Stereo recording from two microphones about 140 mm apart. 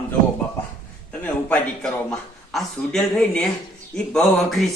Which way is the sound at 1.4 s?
10° left (ahead or behind).